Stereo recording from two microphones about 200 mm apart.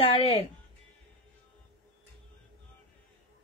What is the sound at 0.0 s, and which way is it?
Speech, 25° left (ahead or behind).